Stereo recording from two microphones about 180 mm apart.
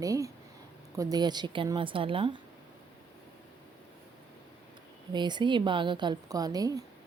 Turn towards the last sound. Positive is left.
turn(degrees=-20)  # may be behind; listen again after turning